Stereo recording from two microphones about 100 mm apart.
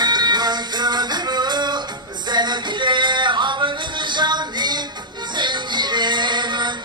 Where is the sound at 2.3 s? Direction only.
50° right (ahead or behind).